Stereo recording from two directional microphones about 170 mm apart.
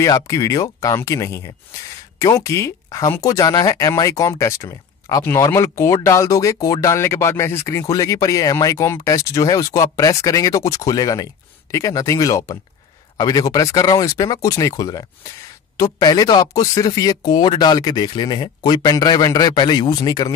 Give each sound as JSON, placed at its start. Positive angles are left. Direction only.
{"t": 0.0, "sound": "speech", "side_deg": 20}